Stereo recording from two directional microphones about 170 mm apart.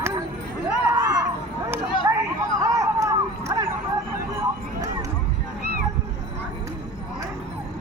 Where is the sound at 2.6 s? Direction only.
20° right (ahead or behind).